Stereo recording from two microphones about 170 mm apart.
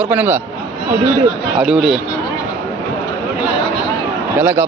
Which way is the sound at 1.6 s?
Centre (ahead or behind).